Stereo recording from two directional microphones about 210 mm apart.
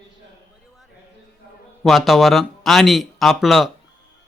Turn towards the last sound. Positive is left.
turn(degrees=0)  # may be behind; listen again after turning